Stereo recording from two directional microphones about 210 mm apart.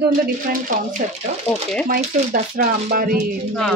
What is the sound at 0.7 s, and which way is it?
Speech, 40° right (ahead or behind).